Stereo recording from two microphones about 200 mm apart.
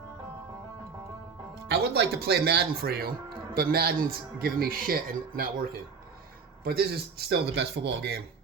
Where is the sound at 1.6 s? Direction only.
55° right (ahead or behind).